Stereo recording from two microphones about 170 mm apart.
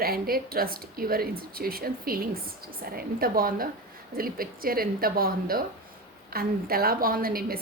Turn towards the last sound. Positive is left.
turn(degrees=-60)  # may be behind; listen again after turning